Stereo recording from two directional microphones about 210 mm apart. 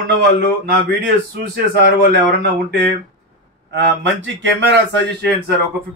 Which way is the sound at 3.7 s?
60° right (ahead or behind).